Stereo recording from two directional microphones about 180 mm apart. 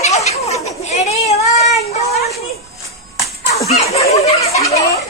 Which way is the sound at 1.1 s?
35° left (ahead or behind).